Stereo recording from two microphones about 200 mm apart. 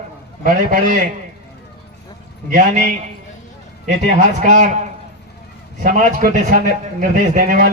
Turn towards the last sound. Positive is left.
turn(degrees=-45)  # may be behind; listen again after turning